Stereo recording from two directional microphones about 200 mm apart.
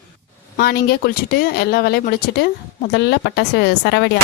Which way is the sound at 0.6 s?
50° left (ahead or behind).